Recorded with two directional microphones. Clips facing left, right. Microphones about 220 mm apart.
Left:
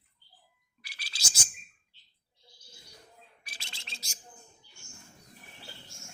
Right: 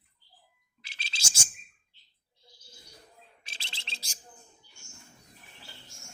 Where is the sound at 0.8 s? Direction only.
25° right (ahead or behind).